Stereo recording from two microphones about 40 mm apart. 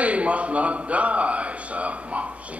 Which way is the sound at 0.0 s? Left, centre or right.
Right.